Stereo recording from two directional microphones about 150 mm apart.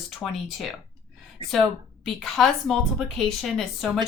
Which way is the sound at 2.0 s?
Centre (ahead or behind).